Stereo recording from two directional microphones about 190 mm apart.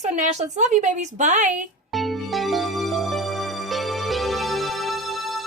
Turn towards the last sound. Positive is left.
turn(degrees=0)  # may be behind; listen again after turning